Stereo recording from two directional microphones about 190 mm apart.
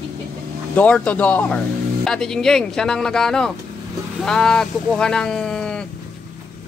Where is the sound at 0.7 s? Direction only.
5° left (ahead or behind).